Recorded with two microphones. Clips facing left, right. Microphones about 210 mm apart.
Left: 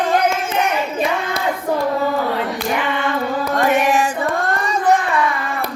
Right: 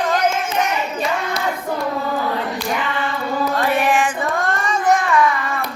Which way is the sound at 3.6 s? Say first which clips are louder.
Left 3 dB; 45° left (ahead or behind).